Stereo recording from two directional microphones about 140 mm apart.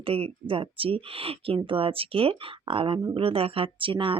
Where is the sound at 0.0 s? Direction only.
40° right (ahead or behind).